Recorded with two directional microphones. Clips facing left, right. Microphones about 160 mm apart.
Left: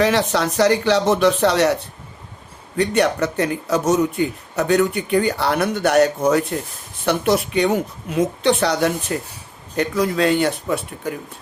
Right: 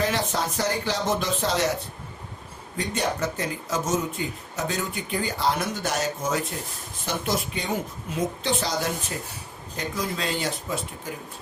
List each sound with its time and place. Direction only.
0.0 s a man's voice: 75° left (ahead or behind)
2.7 s a man's voice: 70° left (ahead or behind)